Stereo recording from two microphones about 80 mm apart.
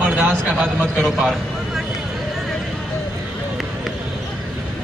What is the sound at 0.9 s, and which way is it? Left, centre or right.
Speech, centre.